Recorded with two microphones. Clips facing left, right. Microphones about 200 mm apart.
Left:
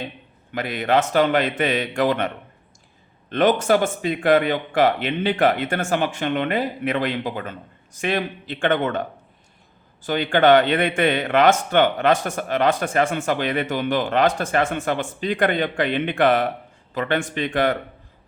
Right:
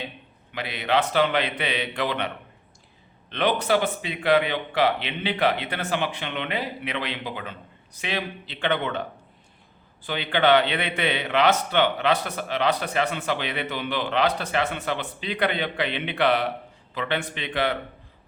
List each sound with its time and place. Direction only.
0.5 s a man's voice: 45° left (ahead or behind)